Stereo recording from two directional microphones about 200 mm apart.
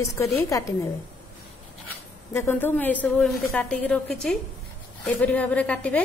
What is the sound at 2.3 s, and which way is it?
A woman's voice, 10° left (ahead or behind).